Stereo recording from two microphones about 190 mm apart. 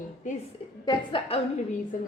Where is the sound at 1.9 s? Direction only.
45° left (ahead or behind).